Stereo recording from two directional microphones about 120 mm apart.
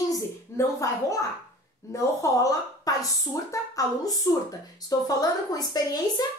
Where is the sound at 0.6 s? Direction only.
25° left (ahead or behind).